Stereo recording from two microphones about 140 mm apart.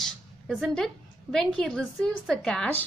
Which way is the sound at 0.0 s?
5° left (ahead or behind).